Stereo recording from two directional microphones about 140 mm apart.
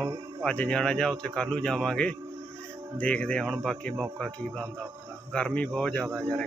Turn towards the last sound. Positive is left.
turn(degrees=5)  # may be behind; listen again after turning